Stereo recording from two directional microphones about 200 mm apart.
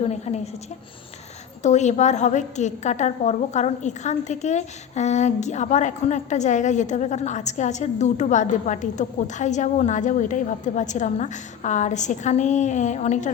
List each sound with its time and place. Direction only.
0.0 s a woman's voice: 35° left (ahead or behind)
1.6 s a woman's voice: 35° left (ahead or behind)